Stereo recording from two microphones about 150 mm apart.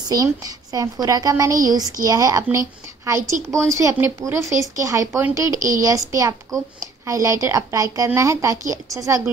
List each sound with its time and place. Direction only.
0.1 s a woman's voice: 25° right (ahead or behind)